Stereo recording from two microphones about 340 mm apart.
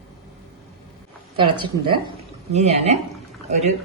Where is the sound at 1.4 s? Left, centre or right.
Centre.